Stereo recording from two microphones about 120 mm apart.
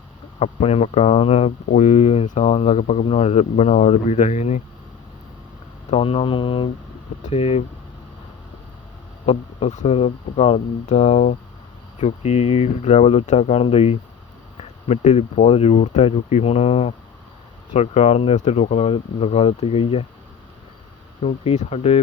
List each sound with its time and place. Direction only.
0.3 s speech: 60° left (ahead or behind)
5.9 s speech: 50° left (ahead or behind)
7.2 s speech: 65° left (ahead or behind)
9.2 s speech: 55° left (ahead or behind)
9.8 s speech: 55° left (ahead or behind)
21.2 s speech: 60° left (ahead or behind)